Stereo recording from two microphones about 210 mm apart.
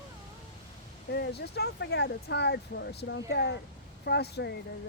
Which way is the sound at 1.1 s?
50° left (ahead or behind).